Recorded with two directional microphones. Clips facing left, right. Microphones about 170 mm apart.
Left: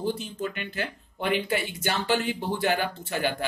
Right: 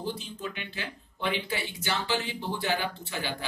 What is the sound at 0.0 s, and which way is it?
Speech, 50° left (ahead or behind).